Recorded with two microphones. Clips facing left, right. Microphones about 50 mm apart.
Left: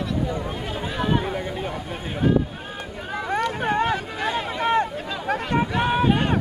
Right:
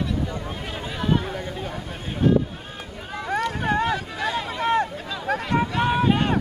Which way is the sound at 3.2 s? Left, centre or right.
Centre.